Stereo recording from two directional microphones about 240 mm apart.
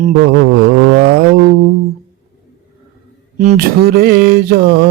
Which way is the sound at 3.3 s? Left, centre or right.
Right.